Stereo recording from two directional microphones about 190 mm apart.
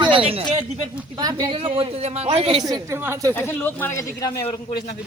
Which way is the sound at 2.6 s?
15° right (ahead or behind).